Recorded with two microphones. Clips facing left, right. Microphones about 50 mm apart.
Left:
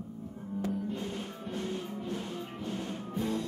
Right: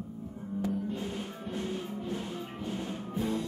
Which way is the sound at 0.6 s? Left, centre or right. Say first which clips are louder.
Right 1 dB; centre.